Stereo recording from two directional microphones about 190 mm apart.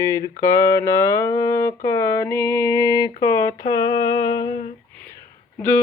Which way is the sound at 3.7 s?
20° left (ahead or behind).